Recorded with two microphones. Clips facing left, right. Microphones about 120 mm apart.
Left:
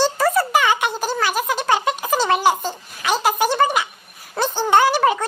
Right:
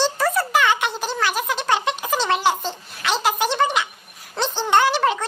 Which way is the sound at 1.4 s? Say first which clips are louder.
Left 2 dB; 10° left (ahead or behind).